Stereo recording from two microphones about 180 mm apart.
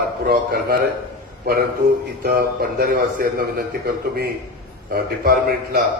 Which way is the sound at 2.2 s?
55° right (ahead or behind).